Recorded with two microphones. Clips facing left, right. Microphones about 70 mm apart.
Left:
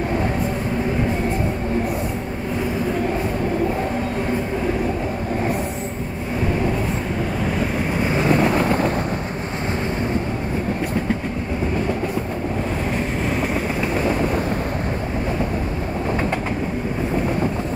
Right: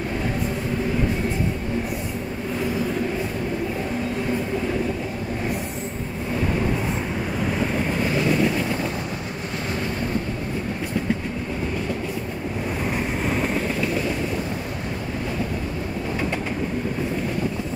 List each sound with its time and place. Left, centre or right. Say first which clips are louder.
8.0 s wind noise: left 3 dB; left
8.3 s vehicle: left 4 dB; left